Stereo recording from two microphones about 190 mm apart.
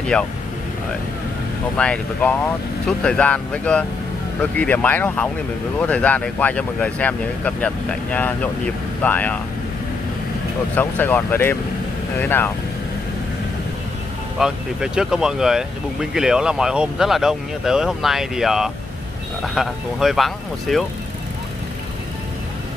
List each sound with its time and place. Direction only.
0.1 s speech: 5° left (ahead or behind)
1.8 s speech: 5° left (ahead or behind)
10.7 s speech: 10° left (ahead or behind)
14.4 s speech: 5° right (ahead or behind)